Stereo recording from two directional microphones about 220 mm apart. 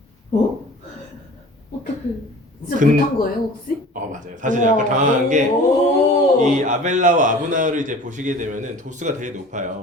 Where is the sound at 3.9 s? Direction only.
35° right (ahead or behind).